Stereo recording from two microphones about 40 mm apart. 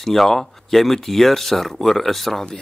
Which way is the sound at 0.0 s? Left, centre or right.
Centre.